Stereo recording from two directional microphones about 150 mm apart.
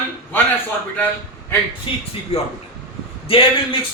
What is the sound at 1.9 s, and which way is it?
Speech, 35° left (ahead or behind).